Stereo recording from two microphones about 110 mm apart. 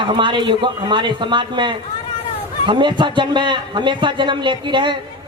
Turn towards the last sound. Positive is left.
turn(degrees=-45)  # may be behind; listen again after turning